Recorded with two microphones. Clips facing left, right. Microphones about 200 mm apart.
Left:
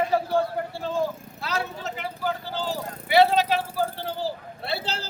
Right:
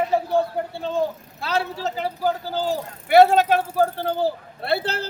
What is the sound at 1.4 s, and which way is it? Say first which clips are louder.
Speech: right 6 dB; 30° right (ahead or behind).